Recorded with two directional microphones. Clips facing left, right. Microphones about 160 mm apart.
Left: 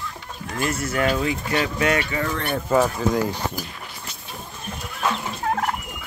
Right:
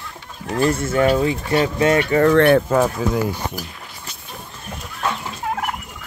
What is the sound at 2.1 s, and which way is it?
Speech, 60° right (ahead or behind).